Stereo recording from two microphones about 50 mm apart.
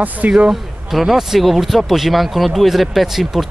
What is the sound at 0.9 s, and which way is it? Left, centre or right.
Speech, centre.